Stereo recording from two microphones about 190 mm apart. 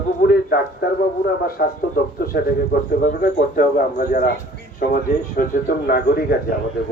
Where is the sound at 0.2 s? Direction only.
55° left (ahead or behind).